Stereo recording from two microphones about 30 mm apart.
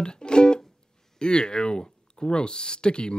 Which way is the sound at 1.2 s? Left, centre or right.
Left.